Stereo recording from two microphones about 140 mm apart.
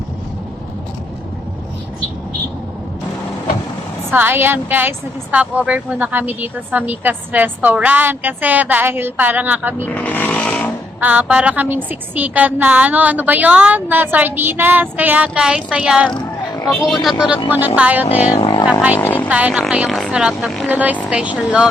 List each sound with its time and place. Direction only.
4.1 s a woman's voice: 15° right (ahead or behind)
9.8 s vehicle: 10° left (ahead or behind)
11.0 s a woman's voice: 10° right (ahead or behind)
16.1 s a sound: 25° left (ahead or behind)
16.8 s a woman's voice: centre (ahead or behind)
18.3 s vehicle: 35° left (ahead or behind)
18.9 s speech: 15° left (ahead or behind)
19.3 s a woman's voice: 10° right (ahead or behind)